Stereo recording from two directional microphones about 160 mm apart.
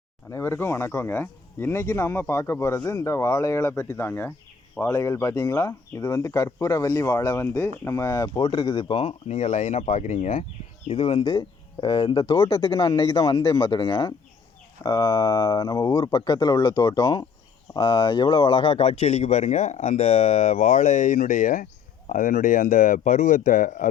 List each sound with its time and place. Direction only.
0.3 s speech: 15° left (ahead or behind)
8.4 s speech: 30° left (ahead or behind)
12.7 s speech: 20° left (ahead or behind); by 23.9 s 55° left (ahead or behind)